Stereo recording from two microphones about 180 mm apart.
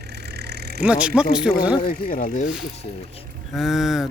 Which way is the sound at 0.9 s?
5° right (ahead or behind).